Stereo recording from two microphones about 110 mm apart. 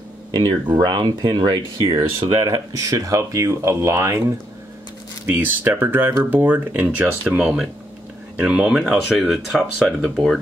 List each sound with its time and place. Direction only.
0.3 s speech: 35° right (ahead or behind)
1.9 s speech: 25° right (ahead or behind)
5.2 s speech: 20° right (ahead or behind); by 10.4 s 5° left (ahead or behind)